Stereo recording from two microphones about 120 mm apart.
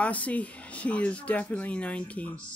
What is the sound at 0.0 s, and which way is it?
Speech, 10° left (ahead or behind).